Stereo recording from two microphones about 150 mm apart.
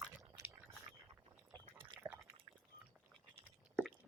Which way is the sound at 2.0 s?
15° right (ahead or behind).